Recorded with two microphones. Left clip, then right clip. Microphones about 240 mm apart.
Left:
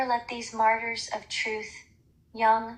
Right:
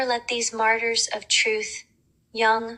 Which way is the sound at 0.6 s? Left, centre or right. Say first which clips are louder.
Right 3 dB; right.